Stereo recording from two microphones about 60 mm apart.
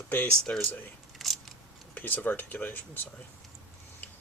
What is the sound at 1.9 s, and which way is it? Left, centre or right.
Speech, left.